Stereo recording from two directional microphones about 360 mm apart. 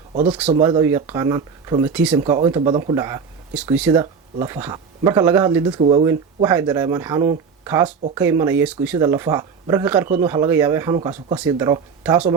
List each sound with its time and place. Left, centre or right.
0.1 s speech: centre